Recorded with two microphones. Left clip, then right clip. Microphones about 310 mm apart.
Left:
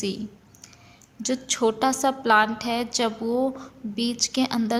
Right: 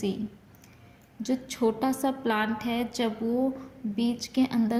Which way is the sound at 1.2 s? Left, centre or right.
Left.